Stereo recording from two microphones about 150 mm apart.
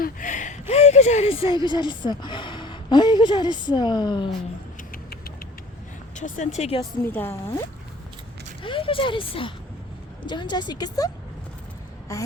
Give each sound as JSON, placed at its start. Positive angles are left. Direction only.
{"t": 0.0, "sound": "a sound", "side_deg": 60}
{"t": 0.7, "sound": "speech", "side_deg": 45}
{"t": 4.8, "sound": "a sound", "side_deg": 75}
{"t": 6.1, "sound": "speech", "side_deg": 55}
{"t": 7.0, "sound": "speech", "side_deg": 15}
{"t": 8.6, "sound": "a woman's voice", "side_deg": 35}
{"t": 12.1, "sound": "a woman's voice", "side_deg": 20}